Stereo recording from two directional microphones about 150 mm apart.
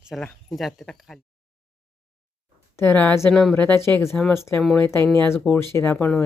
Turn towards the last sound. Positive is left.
turn(degrees=15)  # may be behind; listen again after turning